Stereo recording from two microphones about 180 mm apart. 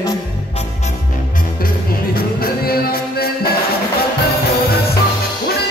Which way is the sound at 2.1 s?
55° left (ahead or behind).